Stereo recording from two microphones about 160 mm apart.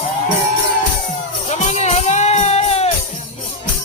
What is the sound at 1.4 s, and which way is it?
Music, 45° left (ahead or behind).